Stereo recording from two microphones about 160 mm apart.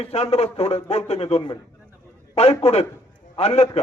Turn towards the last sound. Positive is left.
turn(degrees=40)  # may be behind; listen again after turning